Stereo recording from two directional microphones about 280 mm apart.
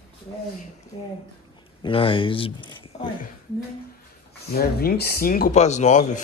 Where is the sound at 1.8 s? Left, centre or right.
Centre.